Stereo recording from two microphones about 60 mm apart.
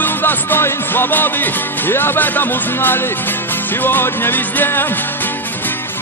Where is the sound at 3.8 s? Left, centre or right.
Left.